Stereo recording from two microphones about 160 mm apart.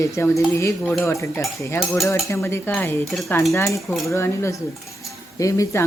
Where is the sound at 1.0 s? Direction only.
20° left (ahead or behind).